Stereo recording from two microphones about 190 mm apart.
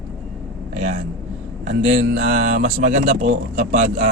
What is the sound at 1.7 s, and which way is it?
Speech, 40° right (ahead or behind).